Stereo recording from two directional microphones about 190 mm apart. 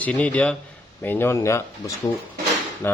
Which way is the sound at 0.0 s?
5° left (ahead or behind).